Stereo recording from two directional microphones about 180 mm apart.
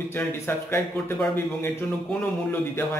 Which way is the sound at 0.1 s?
15° left (ahead or behind).